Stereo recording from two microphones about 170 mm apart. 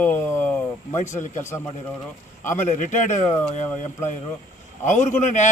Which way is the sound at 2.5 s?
50° left (ahead or behind).